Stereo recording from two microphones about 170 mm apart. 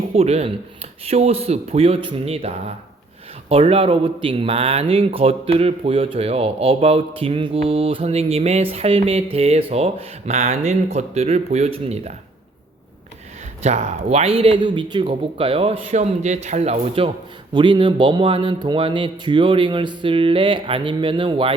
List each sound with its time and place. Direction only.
0.1 s speech: 40° right (ahead or behind)
13.6 s speech: 40° right (ahead or behind)